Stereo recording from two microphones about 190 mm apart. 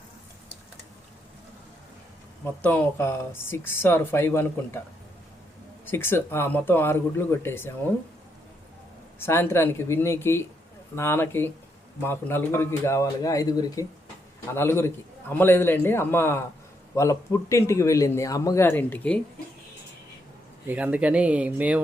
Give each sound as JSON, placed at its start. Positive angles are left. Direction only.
{"t": 2.6, "sound": "speech", "side_deg": 10}
{"t": 5.8, "sound": "speech", "side_deg": 10}
{"t": 9.1, "sound": "speech", "side_deg": 10}
{"t": 20.7, "sound": "speech", "side_deg": -10}